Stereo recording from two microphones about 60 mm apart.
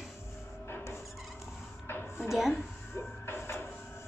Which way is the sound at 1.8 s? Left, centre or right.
Left.